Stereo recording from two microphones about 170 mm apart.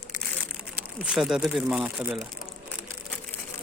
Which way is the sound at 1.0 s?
5° right (ahead or behind).